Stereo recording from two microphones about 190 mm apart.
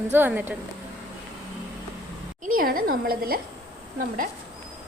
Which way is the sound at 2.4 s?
50° right (ahead or behind).